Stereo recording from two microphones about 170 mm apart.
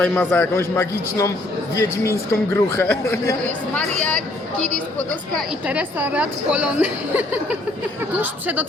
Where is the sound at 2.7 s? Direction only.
15° left (ahead or behind).